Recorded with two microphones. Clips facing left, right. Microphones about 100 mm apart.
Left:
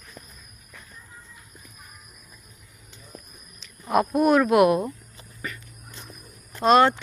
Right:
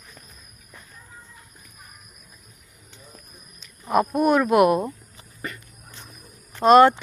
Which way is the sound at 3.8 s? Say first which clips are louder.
Even; centre (ahead or behind).